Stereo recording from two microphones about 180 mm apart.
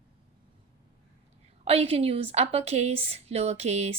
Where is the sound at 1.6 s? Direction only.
35° right (ahead or behind).